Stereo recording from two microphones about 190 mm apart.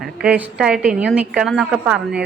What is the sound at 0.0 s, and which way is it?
A woman's voice, 5° right (ahead or behind).